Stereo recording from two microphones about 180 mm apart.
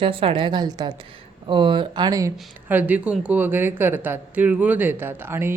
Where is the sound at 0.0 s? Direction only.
30° right (ahead or behind).